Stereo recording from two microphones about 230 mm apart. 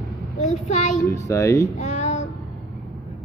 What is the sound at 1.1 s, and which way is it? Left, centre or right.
Speech, centre.